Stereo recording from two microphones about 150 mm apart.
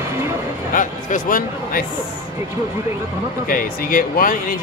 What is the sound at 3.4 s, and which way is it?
Speech, 70° left (ahead or behind).